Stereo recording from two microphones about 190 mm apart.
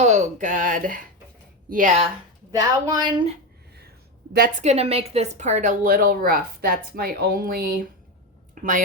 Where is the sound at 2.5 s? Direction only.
20° right (ahead or behind).